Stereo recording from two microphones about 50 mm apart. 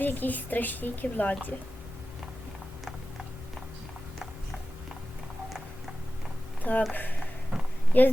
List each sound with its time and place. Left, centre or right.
0.0 s a woman's voice: left
6.6 s speech: left
7.9 s a woman's voice: left